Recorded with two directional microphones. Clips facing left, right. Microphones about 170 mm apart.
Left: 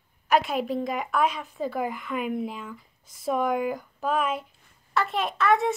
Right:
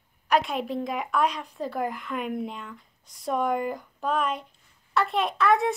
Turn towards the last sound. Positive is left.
turn(degrees=0)  # may be behind; listen again after turning